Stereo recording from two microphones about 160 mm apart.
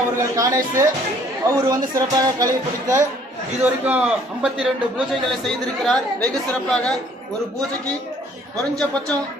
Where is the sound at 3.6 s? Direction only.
10° right (ahead or behind).